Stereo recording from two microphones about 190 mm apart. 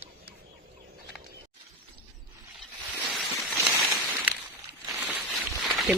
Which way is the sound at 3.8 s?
Centre (ahead or behind).